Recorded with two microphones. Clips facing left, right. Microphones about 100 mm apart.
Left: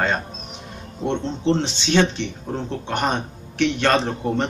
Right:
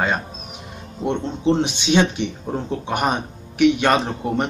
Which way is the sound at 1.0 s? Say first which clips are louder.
Right 1 dB; 10° right (ahead or behind).